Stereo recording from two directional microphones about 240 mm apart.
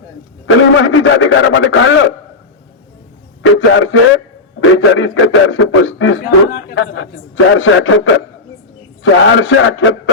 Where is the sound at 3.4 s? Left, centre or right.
Left.